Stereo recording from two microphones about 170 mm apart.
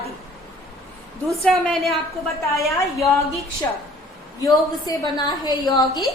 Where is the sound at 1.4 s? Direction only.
Centre (ahead or behind).